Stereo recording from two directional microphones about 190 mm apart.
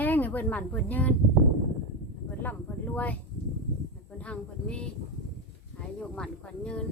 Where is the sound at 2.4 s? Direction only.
10° left (ahead or behind).